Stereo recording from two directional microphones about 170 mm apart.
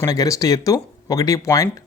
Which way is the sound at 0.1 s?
20° left (ahead or behind).